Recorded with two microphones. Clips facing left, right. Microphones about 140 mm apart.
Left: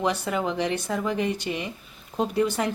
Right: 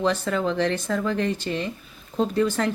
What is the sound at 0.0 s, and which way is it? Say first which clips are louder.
A woman's voice: right 2 dB; 15° left (ahead or behind).